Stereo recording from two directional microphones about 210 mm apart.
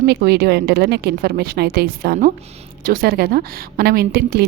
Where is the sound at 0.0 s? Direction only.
50° right (ahead or behind).